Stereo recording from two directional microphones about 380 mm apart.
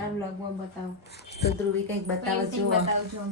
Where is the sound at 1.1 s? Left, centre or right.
Left.